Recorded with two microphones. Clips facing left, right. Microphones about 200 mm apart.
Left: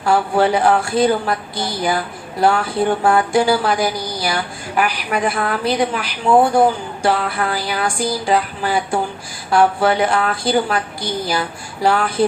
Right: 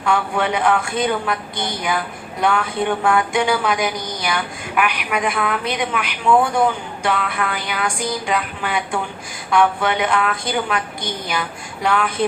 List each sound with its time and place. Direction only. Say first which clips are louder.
0.0 s speech: left 4 dB; 35° left (ahead or behind)